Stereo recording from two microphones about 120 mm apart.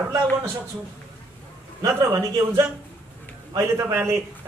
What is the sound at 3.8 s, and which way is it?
Speech, 20° right (ahead or behind).